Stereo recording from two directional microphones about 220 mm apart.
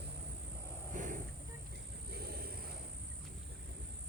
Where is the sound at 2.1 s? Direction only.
45° right (ahead or behind).